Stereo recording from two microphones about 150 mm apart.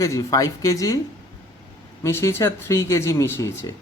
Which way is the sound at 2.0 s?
20° left (ahead or behind).